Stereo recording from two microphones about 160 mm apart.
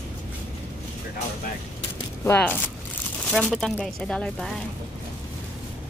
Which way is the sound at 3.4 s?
Centre (ahead or behind).